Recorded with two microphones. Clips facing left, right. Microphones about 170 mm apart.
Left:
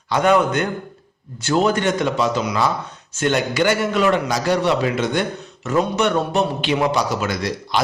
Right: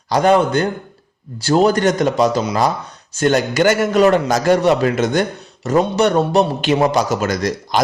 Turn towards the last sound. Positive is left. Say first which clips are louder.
# right 4 dB
turn(degrees=-40)  # may be behind; listen again after turning